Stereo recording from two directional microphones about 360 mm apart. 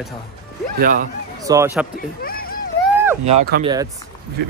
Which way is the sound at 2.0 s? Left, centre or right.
Left.